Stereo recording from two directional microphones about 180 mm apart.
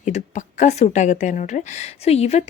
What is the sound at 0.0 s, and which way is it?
A woman's voice, 40° left (ahead or behind).